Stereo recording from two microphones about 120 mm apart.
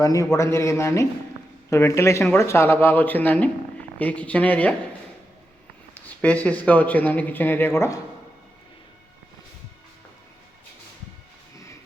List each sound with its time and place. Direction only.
0.0 s speech: 25° left (ahead or behind); by 4.7 s 10° left (ahead or behind)
5.9 s speech: 10° left (ahead or behind)